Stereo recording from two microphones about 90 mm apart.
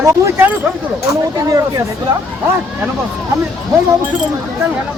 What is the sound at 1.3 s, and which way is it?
Speech, 40° right (ahead or behind).